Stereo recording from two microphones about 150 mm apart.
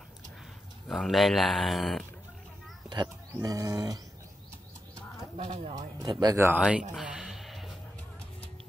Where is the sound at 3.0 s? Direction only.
20° right (ahead or behind).